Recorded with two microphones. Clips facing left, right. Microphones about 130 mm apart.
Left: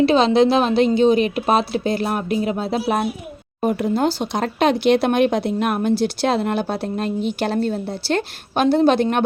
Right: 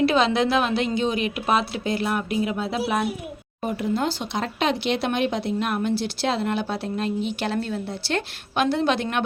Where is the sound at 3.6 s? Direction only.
50° left (ahead or behind).